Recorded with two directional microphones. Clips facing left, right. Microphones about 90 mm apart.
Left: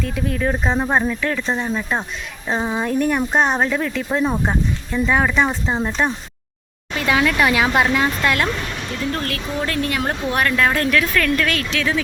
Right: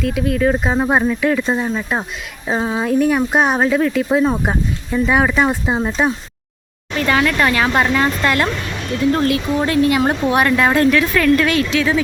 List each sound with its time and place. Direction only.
0.0 s speech: centre (ahead or behind)
6.9 s speech: 5° left (ahead or behind)
9.1 s speech: 20° right (ahead or behind); by 11.9 s 5° right (ahead or behind)